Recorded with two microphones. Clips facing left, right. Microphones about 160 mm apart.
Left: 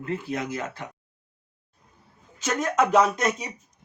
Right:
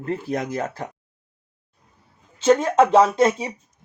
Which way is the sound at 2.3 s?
30° right (ahead or behind).